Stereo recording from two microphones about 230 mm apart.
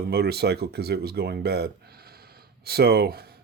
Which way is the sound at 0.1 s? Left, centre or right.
Right.